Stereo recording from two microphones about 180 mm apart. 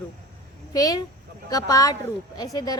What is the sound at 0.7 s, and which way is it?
A woman's voice, 20° left (ahead or behind).